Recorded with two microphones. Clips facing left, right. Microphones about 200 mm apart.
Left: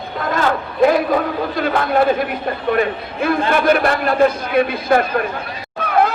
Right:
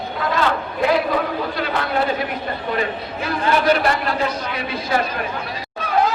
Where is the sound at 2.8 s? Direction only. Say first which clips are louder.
Left 5 dB; 55° left (ahead or behind).